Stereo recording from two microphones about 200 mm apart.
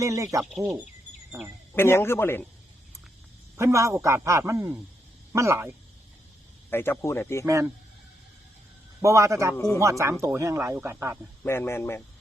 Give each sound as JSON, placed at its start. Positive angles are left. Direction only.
{"t": 0.0, "sound": "speech", "side_deg": -15}
{"t": 1.7, "sound": "speech", "side_deg": 10}
{"t": 3.6, "sound": "speech", "side_deg": -15}
{"t": 6.7, "sound": "speech", "side_deg": 10}
{"t": 7.4, "sound": "speech", "side_deg": -15}
{"t": 9.0, "sound": "speech", "side_deg": -15}
{"t": 9.6, "sound": "speech", "side_deg": 15}
{"t": 10.0, "sound": "speech", "side_deg": -15}
{"t": 11.4, "sound": "speech", "side_deg": 10}